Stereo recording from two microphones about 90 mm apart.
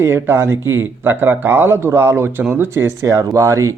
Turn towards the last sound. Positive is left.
turn(degrees=-35)  # may be behind; listen again after turning